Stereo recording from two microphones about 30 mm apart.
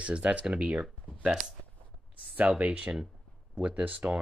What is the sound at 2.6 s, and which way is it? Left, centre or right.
Speech, right.